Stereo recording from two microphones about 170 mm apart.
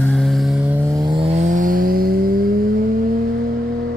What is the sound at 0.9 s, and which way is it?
Vehicle, 20° right (ahead or behind).